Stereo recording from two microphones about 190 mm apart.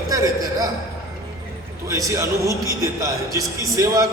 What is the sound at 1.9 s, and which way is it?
A man's voice, 15° right (ahead or behind).